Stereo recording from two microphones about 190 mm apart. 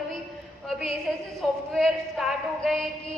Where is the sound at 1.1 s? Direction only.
Centre (ahead or behind).